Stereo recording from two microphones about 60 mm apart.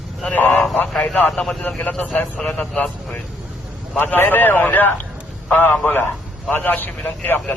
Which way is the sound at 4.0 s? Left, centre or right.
Left.